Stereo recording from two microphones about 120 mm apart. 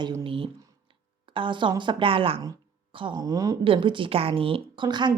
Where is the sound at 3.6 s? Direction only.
45° right (ahead or behind).